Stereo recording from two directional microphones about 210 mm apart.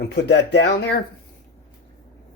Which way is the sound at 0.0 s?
55° left (ahead or behind).